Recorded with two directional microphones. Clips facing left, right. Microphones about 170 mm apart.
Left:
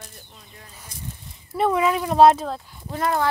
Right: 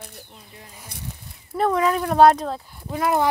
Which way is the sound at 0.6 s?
15° right (ahead or behind).